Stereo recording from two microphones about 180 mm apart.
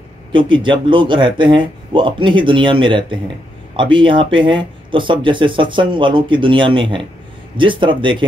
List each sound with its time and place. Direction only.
0.3 s speech: 25° right (ahead or behind)